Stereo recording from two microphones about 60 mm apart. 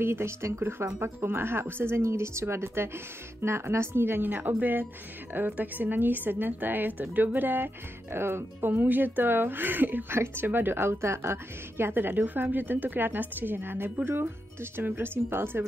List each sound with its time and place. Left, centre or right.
0.0 s a woman's voice: right